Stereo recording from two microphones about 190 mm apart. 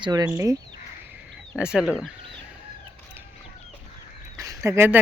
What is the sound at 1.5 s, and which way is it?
Speech, 5° right (ahead or behind).